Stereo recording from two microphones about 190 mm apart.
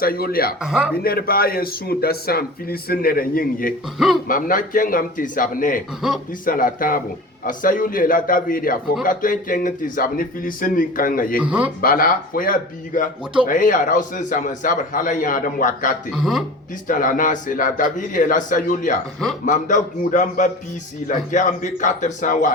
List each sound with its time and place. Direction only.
0.0 s a man's voice: 55° left (ahead or behind)
3.9 s a man's voice: centre (ahead or behind)
4.3 s a man's voice: 45° left (ahead or behind)
6.0 s a man's voice: 5° right (ahead or behind)
6.4 s a man's voice: 45° left (ahead or behind)
11.3 s a man's voice: 5° right (ahead or behind)
11.8 s a man's voice: 50° left (ahead or behind)
16.1 s a man's voice: centre (ahead or behind)
16.9 s a man's voice: 45° left (ahead or behind)